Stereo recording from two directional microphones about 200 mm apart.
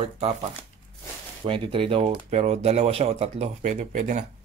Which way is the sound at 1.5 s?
25° right (ahead or behind).